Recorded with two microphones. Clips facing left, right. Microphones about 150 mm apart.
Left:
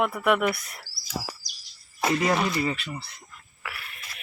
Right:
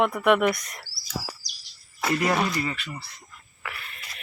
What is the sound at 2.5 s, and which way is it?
Speech, 15° left (ahead or behind).